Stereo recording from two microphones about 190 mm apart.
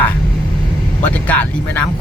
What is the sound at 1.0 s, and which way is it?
Speech, 5° left (ahead or behind).